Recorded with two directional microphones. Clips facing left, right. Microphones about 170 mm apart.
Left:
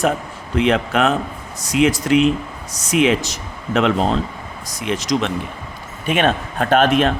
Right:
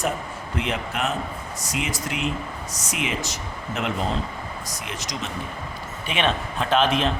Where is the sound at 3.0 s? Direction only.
90° left.